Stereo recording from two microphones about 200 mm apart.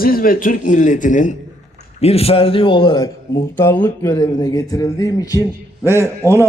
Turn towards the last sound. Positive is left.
turn(degrees=-10)  # may be behind; listen again after turning